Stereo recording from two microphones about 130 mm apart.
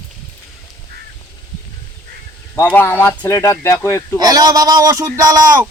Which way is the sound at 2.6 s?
15° left (ahead or behind).